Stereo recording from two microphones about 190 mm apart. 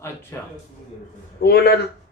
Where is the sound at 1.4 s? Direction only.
55° left (ahead or behind).